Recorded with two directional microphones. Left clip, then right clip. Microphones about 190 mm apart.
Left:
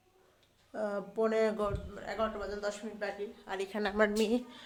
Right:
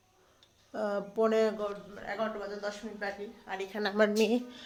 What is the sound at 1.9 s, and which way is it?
A woman's voice, 10° left (ahead or behind).